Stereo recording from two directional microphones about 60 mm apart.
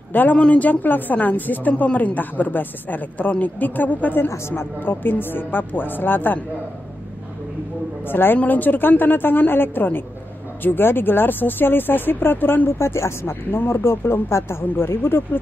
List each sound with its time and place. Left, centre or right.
0.1 s a woman's voice: left
4.3 s speech: left
4.7 s speech: left
8.1 s speech: left
12.7 s speech: left